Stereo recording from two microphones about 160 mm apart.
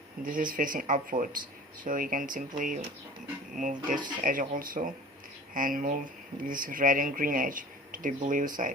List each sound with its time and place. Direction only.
0.2 s speech: 60° right (ahead or behind)